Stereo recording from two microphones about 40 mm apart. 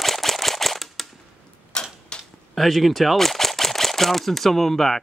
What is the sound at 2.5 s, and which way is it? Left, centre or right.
Speech, centre.